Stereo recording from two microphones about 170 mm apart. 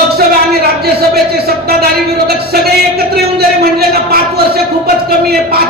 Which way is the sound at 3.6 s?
65° right (ahead or behind).